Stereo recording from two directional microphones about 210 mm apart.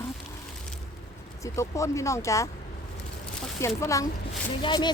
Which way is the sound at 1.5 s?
15° left (ahead or behind).